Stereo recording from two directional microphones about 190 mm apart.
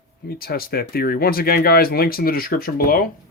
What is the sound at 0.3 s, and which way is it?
Speech, 50° left (ahead or behind).